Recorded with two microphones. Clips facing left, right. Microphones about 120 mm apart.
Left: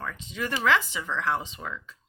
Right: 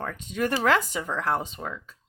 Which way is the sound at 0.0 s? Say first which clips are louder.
Right 5 dB; 50° right (ahead or behind).